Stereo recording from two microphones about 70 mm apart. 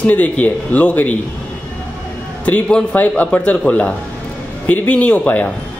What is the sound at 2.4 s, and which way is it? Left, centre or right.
A woman's voice, left.